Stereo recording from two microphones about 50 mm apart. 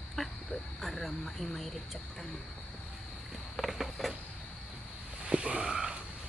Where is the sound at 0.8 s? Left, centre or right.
Centre.